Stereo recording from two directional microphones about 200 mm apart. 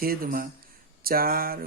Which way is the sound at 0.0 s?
45° right (ahead or behind).